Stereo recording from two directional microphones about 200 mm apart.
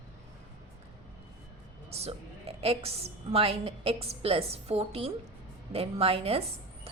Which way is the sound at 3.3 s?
30° right (ahead or behind).